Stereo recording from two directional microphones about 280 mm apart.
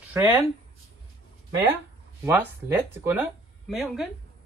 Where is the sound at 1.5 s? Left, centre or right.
Centre.